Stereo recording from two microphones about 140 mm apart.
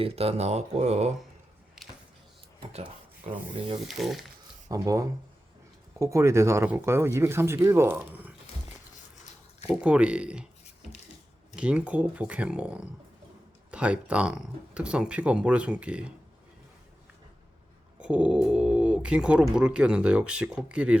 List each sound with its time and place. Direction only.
0.0 s speech: 45° right (ahead or behind)
3.2 s rub: 50° right (ahead or behind)
3.8 s speech: centre (ahead or behind)
4.7 s speech: 25° right (ahead or behind)
9.6 s speech: 10° right (ahead or behind)
11.5 s speech: 5° right (ahead or behind)
18.0 s speech: 10° right (ahead or behind)